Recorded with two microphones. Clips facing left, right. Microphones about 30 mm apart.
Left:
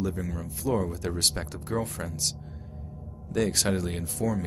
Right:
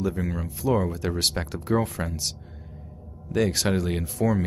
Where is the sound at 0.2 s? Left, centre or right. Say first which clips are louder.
Right 5 dB; right.